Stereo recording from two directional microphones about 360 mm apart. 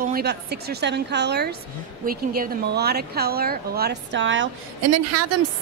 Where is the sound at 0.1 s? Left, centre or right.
Right.